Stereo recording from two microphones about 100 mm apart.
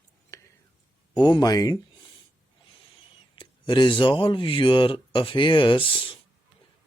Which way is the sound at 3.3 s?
50° left (ahead or behind).